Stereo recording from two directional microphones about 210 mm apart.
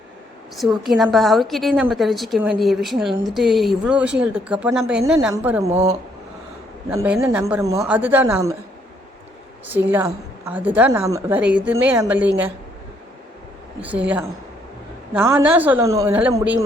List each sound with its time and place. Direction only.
0.5 s a woman's voice: centre (ahead or behind)
5.7 s speech: 30° right (ahead or behind)
6.9 s a woman's voice: 10° right (ahead or behind)
9.6 s a woman's voice: 10° right (ahead or behind)
13.8 s a woman's voice: 5° right (ahead or behind)